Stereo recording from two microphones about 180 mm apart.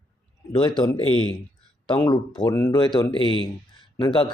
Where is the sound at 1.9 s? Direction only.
25° left (ahead or behind).